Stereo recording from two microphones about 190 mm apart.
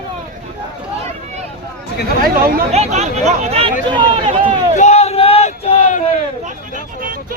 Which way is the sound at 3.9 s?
30° right (ahead or behind).